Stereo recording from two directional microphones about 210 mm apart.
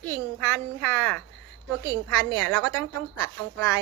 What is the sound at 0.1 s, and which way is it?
A child's voice, 5° left (ahead or behind).